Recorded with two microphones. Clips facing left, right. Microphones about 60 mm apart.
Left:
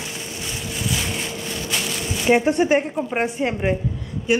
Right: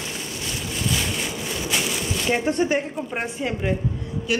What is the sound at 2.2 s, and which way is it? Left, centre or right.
A woman's voice, centre.